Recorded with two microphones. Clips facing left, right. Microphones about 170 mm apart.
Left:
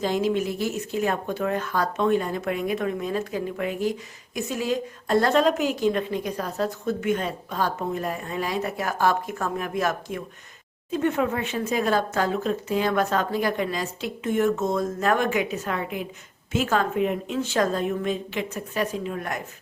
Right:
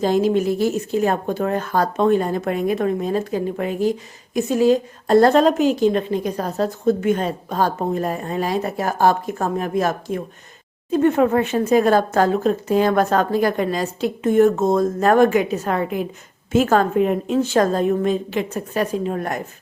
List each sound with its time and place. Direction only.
0.0 s a woman's voice: 40° right (ahead or behind)